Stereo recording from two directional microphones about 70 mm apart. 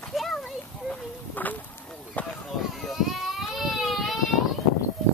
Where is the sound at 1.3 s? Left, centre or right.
Left.